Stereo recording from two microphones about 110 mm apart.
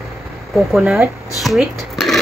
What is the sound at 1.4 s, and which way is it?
Dishes, centre (ahead or behind).